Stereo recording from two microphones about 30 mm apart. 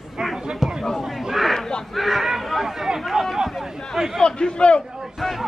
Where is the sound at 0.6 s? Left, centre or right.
Centre.